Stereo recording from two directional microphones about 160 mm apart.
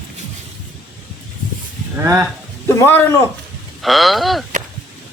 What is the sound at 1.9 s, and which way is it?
Speech, 20° right (ahead or behind).